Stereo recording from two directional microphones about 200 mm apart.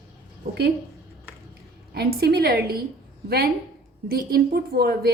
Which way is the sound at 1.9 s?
50° right (ahead or behind).